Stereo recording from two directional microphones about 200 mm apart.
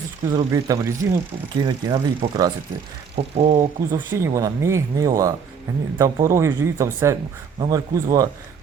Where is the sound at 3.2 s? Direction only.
35° right (ahead or behind).